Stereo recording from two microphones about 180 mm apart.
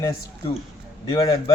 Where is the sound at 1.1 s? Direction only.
25° left (ahead or behind).